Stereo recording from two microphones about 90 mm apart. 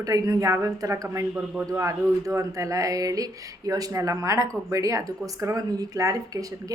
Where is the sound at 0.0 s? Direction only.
40° right (ahead or behind).